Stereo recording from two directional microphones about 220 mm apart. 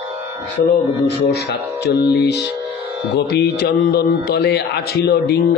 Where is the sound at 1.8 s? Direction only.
50° left (ahead or behind).